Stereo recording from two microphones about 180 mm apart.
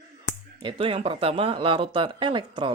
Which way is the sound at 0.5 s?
30° right (ahead or behind).